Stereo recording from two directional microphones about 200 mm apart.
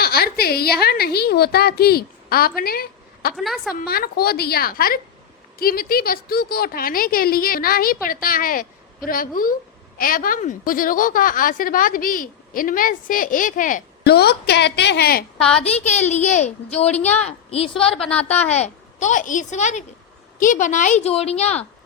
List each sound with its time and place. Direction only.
0.0 s a woman's voice: 50° left (ahead or behind)
3.3 s a woman's voice: centre (ahead or behind)
3.8 s a woman's voice: 50° left (ahead or behind)
14.0 s a woman's voice: 55° left (ahead or behind)
15.5 s a woman's voice: 30° left (ahead or behind)
17.9 s a woman's voice: 5° left (ahead or behind)
18.4 s a woman's voice: 35° left (ahead or behind)